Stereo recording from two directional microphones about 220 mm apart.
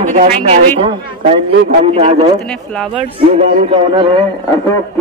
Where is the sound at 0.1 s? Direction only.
30° right (ahead or behind).